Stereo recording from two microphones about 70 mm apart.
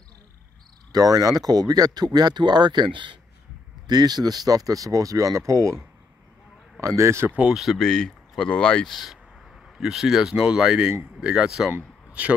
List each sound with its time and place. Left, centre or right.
0.9 s speech: right
3.8 s speech: right
7.0 s speech: right
7.5 s speech: centre
8.9 s speech: centre
12.1 s speech: centre